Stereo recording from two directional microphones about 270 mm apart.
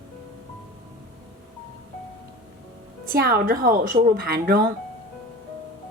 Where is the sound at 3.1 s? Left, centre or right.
Right.